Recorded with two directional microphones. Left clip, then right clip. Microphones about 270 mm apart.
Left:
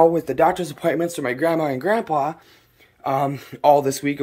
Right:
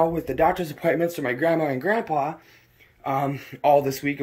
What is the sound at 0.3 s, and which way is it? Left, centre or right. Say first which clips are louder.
Speech: left 3 dB; centre.